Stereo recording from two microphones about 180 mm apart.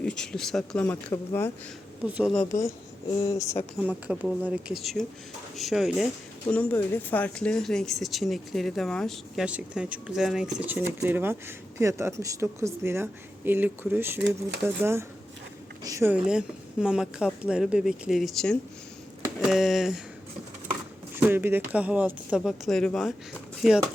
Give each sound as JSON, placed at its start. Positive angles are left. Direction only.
{"t": 0.0, "sound": "speech", "side_deg": 5}
{"t": 2.5, "sound": "speech", "side_deg": 15}
{"t": 4.0, "sound": "speech", "side_deg": -5}
{"t": 16.1, "sound": "speech", "side_deg": -5}
{"t": 21.2, "sound": "speech", "side_deg": -10}